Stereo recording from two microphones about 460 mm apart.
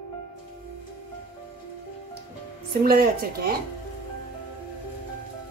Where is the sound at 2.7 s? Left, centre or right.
Centre.